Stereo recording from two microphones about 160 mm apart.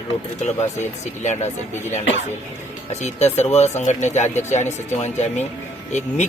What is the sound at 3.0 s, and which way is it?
Speech, 45° left (ahead or behind).